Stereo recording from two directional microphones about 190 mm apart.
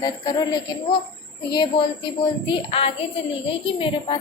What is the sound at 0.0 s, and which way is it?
A woman's voice, 20° left (ahead or behind).